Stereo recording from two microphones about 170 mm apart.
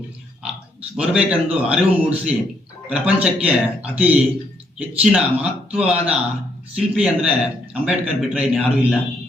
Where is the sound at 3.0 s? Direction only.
10° right (ahead or behind).